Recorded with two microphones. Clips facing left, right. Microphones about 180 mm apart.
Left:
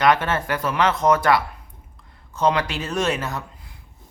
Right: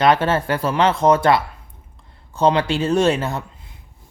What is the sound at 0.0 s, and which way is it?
Speech, 30° right (ahead or behind).